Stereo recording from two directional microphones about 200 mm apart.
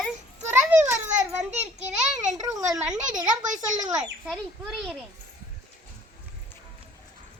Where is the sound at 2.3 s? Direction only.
15° right (ahead or behind).